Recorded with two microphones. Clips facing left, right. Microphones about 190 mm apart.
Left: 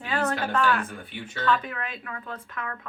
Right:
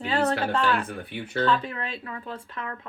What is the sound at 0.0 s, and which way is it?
Speech, 30° right (ahead or behind).